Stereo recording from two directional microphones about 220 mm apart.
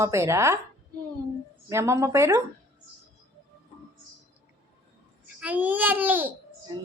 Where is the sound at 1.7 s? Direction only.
10° right (ahead or behind).